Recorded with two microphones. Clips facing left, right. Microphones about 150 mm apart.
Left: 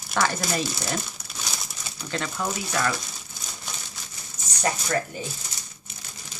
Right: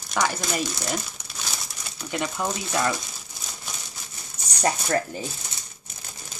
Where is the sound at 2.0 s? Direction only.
15° right (ahead or behind).